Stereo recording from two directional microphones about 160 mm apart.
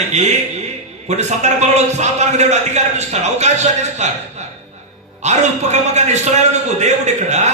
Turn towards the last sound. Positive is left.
turn(degrees=-45)  # may be behind; listen again after turning